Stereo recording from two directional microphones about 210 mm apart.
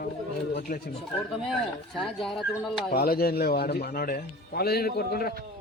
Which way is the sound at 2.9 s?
45° left (ahead or behind).